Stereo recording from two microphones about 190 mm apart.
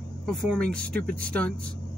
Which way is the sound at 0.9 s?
50° right (ahead or behind).